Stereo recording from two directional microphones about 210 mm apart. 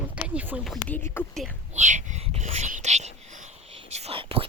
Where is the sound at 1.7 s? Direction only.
35° right (ahead or behind).